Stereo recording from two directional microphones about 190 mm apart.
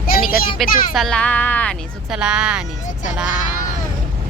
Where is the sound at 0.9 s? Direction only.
5° left (ahead or behind).